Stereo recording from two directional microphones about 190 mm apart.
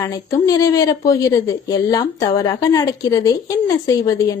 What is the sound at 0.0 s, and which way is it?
A woman's voice, 15° left (ahead or behind).